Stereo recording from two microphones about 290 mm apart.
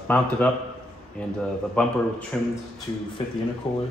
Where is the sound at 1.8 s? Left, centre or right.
Centre.